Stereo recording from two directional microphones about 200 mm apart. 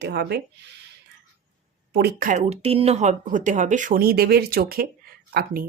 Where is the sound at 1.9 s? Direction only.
55° right (ahead or behind).